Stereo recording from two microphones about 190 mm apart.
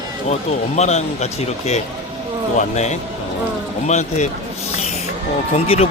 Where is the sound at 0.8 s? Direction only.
35° left (ahead or behind).